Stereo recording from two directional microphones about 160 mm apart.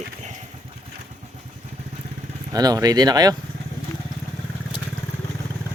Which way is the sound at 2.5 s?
25° right (ahead or behind).